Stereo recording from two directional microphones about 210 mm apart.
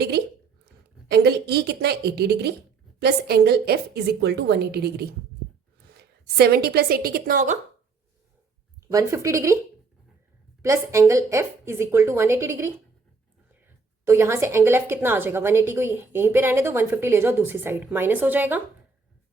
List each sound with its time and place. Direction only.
1.1 s a woman's voice: 50° right (ahead or behind)
8.9 s a woman's voice: 15° right (ahead or behind)
10.6 s a woman's voice: 15° right (ahead or behind)
14.0 s a woman's voice: 10° right (ahead or behind)